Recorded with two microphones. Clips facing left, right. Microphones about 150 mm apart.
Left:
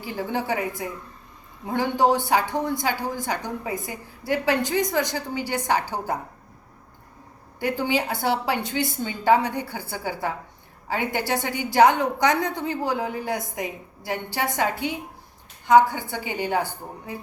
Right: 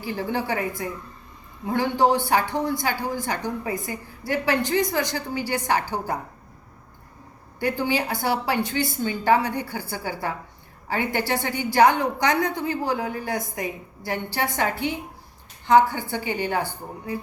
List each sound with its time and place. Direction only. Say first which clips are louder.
0.0 s speech: right 1 dB; 15° left (ahead or behind)
1.6 s speech: even; 15° left (ahead or behind)
7.6 s speech: even; 15° left (ahead or behind)